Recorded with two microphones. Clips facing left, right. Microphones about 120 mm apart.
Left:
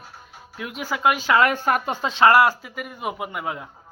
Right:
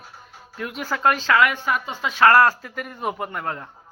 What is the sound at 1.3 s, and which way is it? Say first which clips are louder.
Speech: left 1 dB; 40° left (ahead or behind).